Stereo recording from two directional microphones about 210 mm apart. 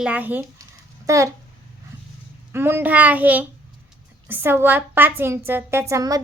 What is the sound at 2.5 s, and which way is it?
A child's voice, 10° right (ahead or behind).